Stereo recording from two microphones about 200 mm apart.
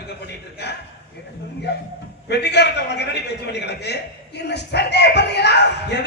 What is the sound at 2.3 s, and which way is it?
Speech, 55° left (ahead or behind).